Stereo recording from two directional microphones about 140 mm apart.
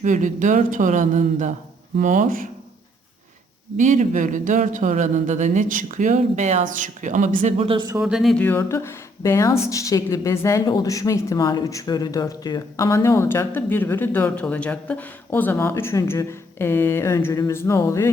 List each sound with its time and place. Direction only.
0.0 s speech: 65° right (ahead or behind)
3.8 s speech: 60° right (ahead or behind); by 7.9 s 40° right (ahead or behind)
8.0 s speech: centre (ahead or behind)
8.4 s a woman's voice: 15° left (ahead or behind)